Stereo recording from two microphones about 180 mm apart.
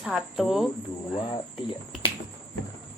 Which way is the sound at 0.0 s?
5° right (ahead or behind).